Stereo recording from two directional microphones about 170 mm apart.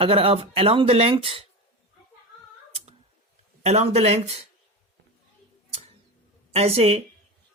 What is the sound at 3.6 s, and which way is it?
Speech, 40° right (ahead or behind).